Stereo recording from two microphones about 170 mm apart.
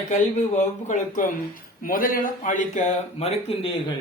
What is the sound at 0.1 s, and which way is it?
Speech, 45° left (ahead or behind).